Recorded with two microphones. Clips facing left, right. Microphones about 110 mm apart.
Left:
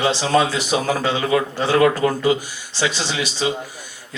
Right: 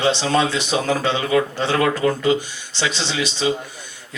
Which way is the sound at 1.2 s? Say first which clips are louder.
Right 1 dB; 30° left (ahead or behind).